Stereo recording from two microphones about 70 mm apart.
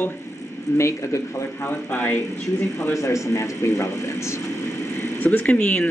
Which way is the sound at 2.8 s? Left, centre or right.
Left.